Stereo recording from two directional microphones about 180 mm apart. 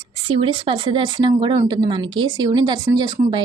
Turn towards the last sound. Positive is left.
turn(degrees=-25)  # may be behind; listen again after turning